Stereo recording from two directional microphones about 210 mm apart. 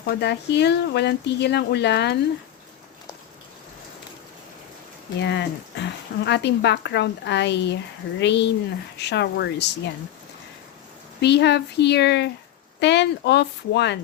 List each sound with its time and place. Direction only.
0.1 s speech: 55° left (ahead or behind)
5.2 s speech: 55° left (ahead or behind)
11.2 s speech: 55° left (ahead or behind)